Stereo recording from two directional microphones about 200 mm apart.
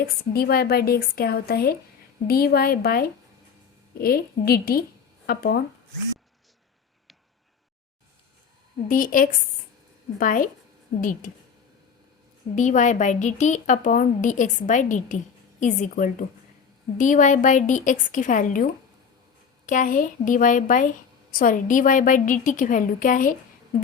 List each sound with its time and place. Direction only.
0.0 s speech: 50° left (ahead or behind)
8.9 s speech: 45° left (ahead or behind)
12.5 s a woman's voice: 40° left (ahead or behind)